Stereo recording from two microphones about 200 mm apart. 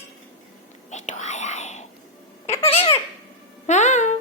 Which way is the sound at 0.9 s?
35° left (ahead or behind).